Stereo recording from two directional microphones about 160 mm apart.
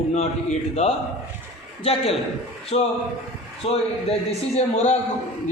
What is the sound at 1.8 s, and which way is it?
Speech, 35° left (ahead or behind).